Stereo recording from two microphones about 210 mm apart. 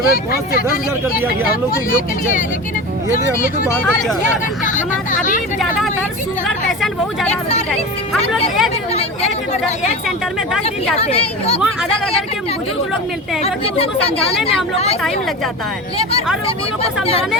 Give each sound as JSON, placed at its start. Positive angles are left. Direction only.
{"t": 0.1, "sound": "speech", "side_deg": 45}
{"t": 1.7, "sound": "speech", "side_deg": 40}
{"t": 4.7, "sound": "hubbub", "side_deg": 40}
{"t": 6.7, "sound": "speech", "side_deg": 0}
{"t": 10.9, "sound": "speech", "side_deg": 30}
{"t": 16.8, "sound": "speech", "side_deg": 25}